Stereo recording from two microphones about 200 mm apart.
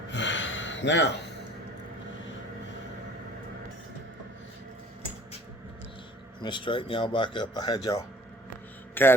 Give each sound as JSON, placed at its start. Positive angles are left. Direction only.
{"t": 0.1, "sound": "gasp", "side_deg": 65}
{"t": 6.4, "sound": "speech", "side_deg": 25}
{"t": 9.0, "sound": "a man's voice", "side_deg": 10}